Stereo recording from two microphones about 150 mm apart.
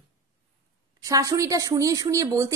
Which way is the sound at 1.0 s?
20° right (ahead or behind).